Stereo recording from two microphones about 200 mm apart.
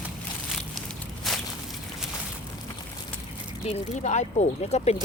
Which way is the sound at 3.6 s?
35° left (ahead or behind).